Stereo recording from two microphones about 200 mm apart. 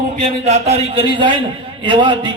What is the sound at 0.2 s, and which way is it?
A man's voice, 35° right (ahead or behind).